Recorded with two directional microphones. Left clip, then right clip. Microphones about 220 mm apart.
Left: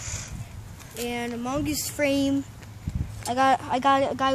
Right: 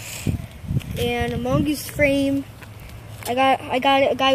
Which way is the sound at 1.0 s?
30° left (ahead or behind).